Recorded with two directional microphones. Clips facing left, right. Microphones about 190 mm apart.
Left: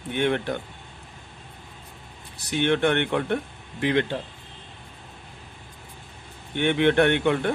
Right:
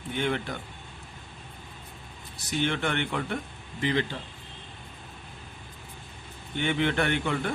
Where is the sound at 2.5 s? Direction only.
60° left (ahead or behind).